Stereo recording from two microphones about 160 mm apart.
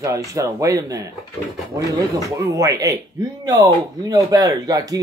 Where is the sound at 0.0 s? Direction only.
20° right (ahead or behind).